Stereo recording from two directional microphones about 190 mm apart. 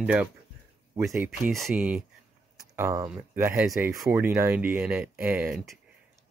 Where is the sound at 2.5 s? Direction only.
15° right (ahead or behind).